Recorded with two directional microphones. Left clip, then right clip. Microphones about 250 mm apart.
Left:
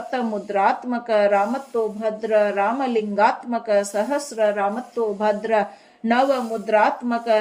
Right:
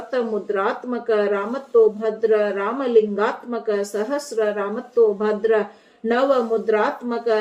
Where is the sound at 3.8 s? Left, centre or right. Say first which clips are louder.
Left 2 dB; left.